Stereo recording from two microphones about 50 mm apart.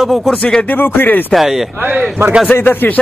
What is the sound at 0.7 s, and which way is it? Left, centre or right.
Speech, left.